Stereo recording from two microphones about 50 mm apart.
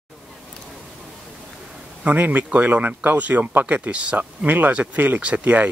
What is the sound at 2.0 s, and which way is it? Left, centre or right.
Speech, right.